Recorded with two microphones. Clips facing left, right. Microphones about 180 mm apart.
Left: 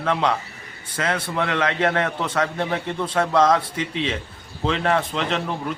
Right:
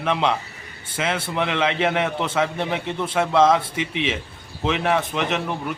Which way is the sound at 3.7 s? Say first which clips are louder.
Even; 85° right.